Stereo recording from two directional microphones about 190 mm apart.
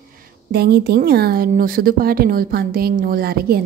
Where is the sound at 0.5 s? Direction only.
55° right (ahead or behind).